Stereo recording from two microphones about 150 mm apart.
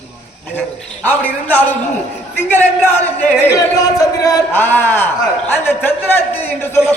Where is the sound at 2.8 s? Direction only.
15° left (ahead or behind).